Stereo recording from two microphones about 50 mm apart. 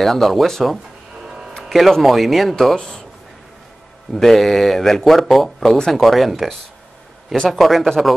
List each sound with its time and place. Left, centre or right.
0.0 s a man's voice: centre
1.2 s a sound: centre
1.6 s a man's voice: centre
4.1 s a man's voice: centre